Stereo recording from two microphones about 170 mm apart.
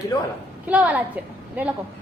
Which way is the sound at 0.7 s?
10° right (ahead or behind).